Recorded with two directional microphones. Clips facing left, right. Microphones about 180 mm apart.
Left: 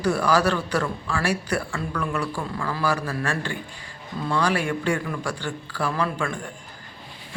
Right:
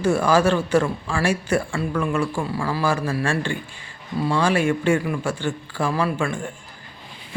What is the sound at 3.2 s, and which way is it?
Speech, 25° right (ahead or behind).